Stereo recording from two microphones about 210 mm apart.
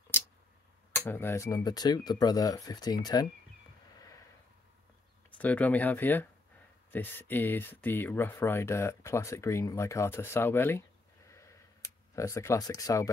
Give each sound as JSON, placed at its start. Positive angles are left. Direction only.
{"t": 0.9, "sound": "speech", "side_deg": 10}
{"t": 5.4, "sound": "speech", "side_deg": 5}
{"t": 11.2, "sound": "a sound", "side_deg": 15}